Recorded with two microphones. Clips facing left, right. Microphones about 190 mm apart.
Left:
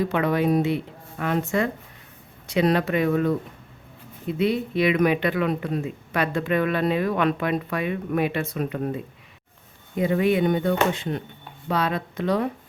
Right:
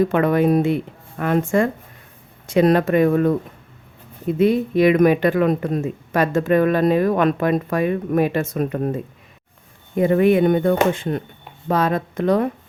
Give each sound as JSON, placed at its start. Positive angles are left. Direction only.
{"t": 0.0, "sound": "speech", "side_deg": -50}